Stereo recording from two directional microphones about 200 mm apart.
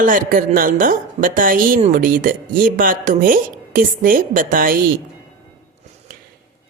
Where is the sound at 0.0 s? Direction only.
45° right (ahead or behind).